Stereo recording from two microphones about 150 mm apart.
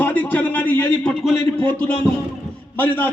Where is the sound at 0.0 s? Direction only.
10° left (ahead or behind).